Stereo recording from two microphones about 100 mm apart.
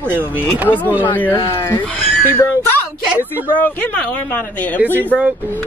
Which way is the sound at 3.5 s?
20° left (ahead or behind).